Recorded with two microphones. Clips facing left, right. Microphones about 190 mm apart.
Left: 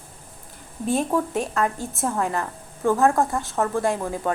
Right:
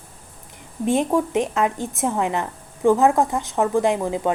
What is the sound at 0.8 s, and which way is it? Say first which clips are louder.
A woman's voice: right 3 dB; 20° right (ahead or behind).